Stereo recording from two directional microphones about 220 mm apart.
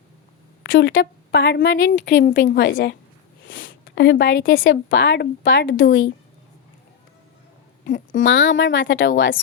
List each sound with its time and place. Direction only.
0.6 s speech: 55° left (ahead or behind)
2.5 s a woman's voice: 40° left (ahead or behind)
3.4 s speech: 60° left (ahead or behind)
7.9 s speech: 35° left (ahead or behind)
8.2 s speech: 55° left (ahead or behind)